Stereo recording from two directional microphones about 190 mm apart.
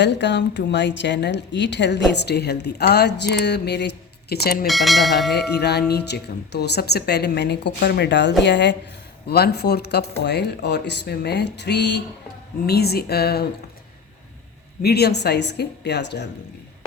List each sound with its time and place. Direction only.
0.0 s a woman's voice: 65° left (ahead or behind)
4.6 s speech: centre (ahead or behind)
5.5 s a woman's voice: 60° left (ahead or behind)
14.8 s a woman's voice: 55° left (ahead or behind)